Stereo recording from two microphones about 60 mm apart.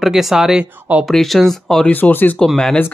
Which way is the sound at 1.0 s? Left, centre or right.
Centre.